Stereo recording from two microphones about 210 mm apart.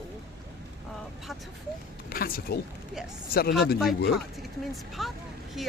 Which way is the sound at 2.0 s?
45° left (ahead or behind).